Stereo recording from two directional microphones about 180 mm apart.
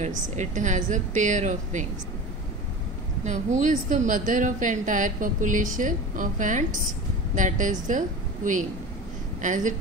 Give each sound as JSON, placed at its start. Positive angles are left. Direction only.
{"t": 0.4, "sound": "a woman's voice", "side_deg": -45}
{"t": 3.3, "sound": "a woman's voice", "side_deg": -40}
{"t": 9.4, "sound": "a woman's voice", "side_deg": -45}